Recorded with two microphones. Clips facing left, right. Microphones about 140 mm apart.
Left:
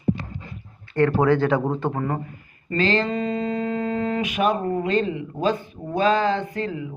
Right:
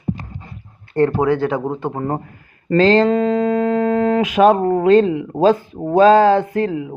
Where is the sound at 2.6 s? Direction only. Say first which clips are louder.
Right 9 dB; 65° right (ahead or behind); by 4.6 s 90° right.